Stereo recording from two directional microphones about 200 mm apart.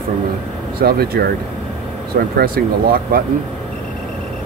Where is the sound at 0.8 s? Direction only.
50° right (ahead or behind).